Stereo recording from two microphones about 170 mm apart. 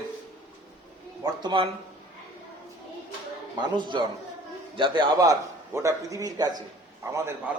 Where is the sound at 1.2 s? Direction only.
30° right (ahead or behind).